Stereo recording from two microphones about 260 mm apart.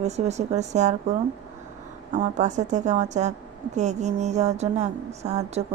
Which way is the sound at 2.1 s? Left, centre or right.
Right.